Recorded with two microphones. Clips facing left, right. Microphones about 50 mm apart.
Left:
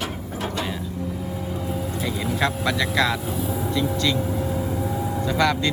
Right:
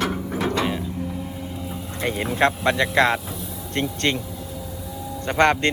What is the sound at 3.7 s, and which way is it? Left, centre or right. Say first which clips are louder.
Speech: right 1 dB; right.